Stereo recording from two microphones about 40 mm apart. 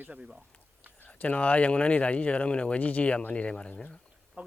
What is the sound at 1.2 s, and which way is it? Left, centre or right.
Speech, left.